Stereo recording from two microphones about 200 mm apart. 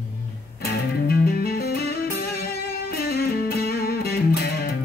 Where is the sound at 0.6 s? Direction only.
50° left (ahead or behind).